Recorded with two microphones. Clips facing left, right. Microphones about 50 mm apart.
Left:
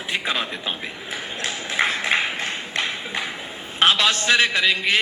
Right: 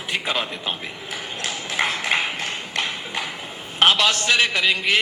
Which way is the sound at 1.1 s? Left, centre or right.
Left.